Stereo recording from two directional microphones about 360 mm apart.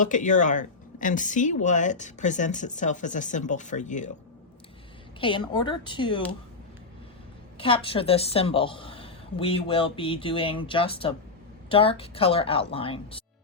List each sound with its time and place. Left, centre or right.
0.0 s speech: left
5.2 s a woman's voice: centre
7.6 s a woman's voice: centre